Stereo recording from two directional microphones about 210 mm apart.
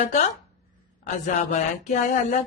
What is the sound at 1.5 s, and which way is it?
Speech, 35° left (ahead or behind).